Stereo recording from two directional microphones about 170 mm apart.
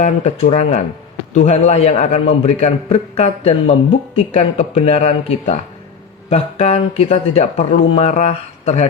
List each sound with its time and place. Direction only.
0.0 s a man's voice: 45° left (ahead or behind)